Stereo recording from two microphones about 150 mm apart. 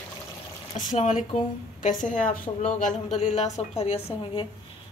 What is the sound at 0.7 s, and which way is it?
A woman's voice, 50° left (ahead or behind).